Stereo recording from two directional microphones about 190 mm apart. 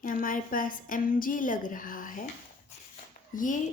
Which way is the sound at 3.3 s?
45° left (ahead or behind).